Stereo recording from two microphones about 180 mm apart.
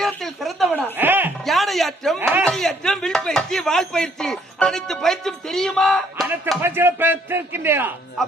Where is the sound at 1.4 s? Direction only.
Centre (ahead or behind).